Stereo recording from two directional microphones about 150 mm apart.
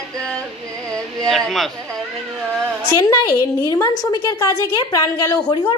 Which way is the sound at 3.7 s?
25° left (ahead or behind).